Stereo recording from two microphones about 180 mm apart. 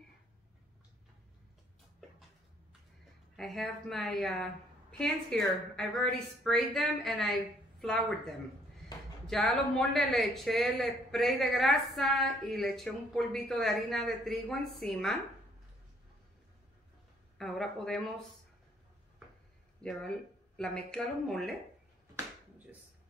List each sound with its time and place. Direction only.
3.3 s a man's voice: centre (ahead or behind)
17.4 s a man's voice: centre (ahead or behind)
19.8 s a man's voice: 5° left (ahead or behind)